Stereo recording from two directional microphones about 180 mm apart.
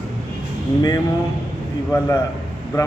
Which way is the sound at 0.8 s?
20° left (ahead or behind).